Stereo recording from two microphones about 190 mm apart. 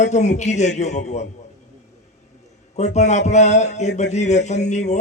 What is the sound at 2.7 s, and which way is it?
Speech, 35° left (ahead or behind).